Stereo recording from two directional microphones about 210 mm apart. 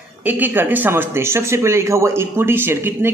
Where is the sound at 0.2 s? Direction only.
10° right (ahead or behind).